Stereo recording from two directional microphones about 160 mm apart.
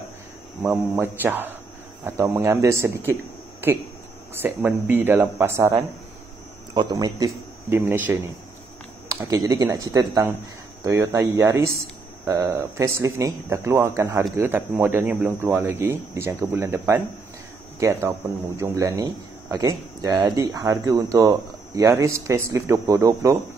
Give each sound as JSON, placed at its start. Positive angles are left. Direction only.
{"t": 0.7, "sound": "speech", "side_deg": -10}
{"t": 4.3, "sound": "speech", "side_deg": -10}